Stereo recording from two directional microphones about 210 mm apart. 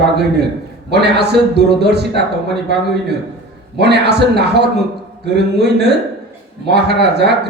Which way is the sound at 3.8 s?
50° right (ahead or behind).